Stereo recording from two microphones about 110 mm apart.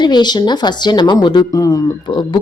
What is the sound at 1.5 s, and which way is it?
Speech, 30° left (ahead or behind).